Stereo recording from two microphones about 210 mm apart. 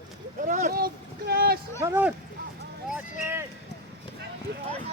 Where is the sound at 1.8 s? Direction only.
10° right (ahead or behind).